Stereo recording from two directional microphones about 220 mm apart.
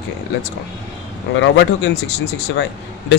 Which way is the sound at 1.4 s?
55° left (ahead or behind).